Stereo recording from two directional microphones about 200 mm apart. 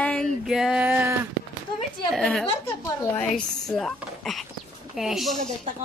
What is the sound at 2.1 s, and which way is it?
Speech, centre (ahead or behind).